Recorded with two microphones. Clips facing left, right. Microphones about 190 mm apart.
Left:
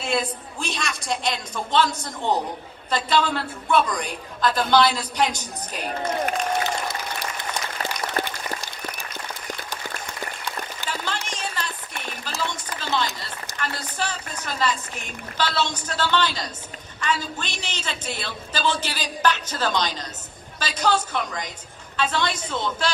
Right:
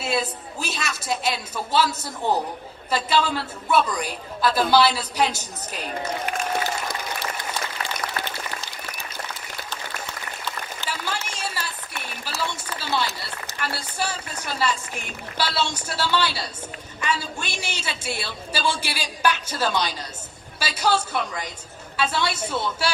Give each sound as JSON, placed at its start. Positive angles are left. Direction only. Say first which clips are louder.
{"t": 0.0, "sound": "a woman's voice", "louder": "even", "side_deg": -5}
{"t": 8.2, "sound": "applause", "louder": "left 7 dB", "side_deg": 45}
{"t": 10.8, "sound": "a sound", "louder": "even", "side_deg": -10}
{"t": 12.4, "sound": "run", "louder": "right 1 dB", "side_deg": -10}
{"t": 13.6, "sound": "a woman's voice", "louder": "even", "side_deg": -10}